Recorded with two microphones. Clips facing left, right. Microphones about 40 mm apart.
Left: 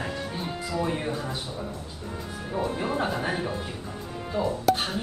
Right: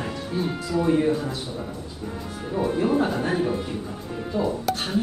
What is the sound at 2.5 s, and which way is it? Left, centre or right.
Speech, centre.